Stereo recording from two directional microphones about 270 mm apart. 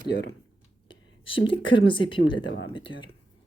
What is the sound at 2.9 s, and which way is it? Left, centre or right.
Speech, left.